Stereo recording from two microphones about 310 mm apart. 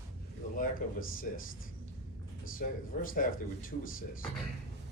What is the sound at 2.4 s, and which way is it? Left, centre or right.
Speech, left.